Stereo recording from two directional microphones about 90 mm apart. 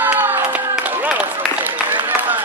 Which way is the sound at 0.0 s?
20° right (ahead or behind).